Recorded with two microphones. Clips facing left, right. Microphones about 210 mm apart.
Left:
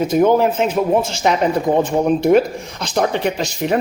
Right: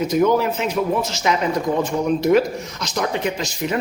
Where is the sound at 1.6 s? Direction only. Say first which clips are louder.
Left 4 dB; 55° left (ahead or behind).